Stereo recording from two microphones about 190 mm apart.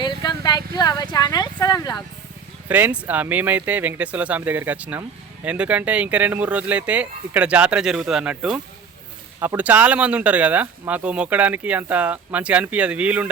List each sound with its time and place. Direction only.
0.0 s a sound: 25° left (ahead or behind)
0.8 s speech: 20° left (ahead or behind)
2.6 s speech: 10° right (ahead or behind)